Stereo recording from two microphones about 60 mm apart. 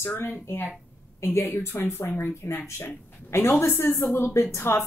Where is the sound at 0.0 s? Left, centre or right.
Left.